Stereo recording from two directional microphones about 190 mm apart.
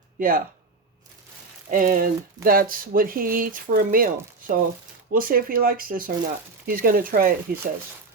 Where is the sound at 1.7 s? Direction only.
45° right (ahead or behind).